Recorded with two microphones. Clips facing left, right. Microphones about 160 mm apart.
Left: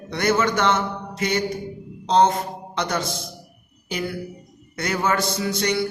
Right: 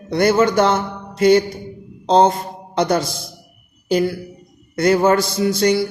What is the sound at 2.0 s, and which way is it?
A man's voice, 30° right (ahead or behind).